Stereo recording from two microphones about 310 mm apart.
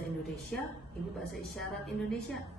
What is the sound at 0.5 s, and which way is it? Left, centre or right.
A woman's voice, centre.